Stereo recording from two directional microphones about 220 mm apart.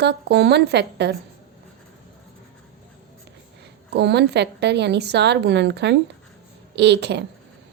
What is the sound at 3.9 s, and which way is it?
A woman's voice, 50° right (ahead or behind).